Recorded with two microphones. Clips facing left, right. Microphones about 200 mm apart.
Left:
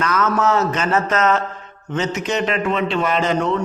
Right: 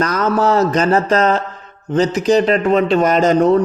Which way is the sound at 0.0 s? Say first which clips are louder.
Right 3 dB; 35° right (ahead or behind).